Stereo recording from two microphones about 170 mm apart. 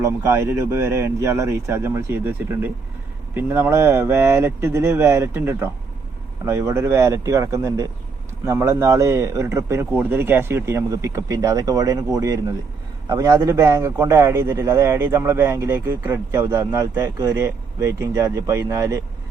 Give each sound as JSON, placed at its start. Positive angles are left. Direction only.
{"t": 0.0, "sound": "a man's voice", "side_deg": -15}